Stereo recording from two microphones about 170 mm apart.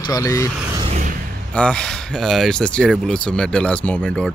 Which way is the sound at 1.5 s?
5° left (ahead or behind).